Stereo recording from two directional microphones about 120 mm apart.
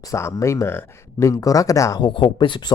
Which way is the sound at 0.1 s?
25° left (ahead or behind).